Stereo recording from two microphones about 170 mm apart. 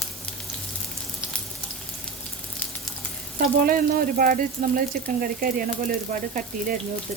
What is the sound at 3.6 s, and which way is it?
Speech, 60° right (ahead or behind).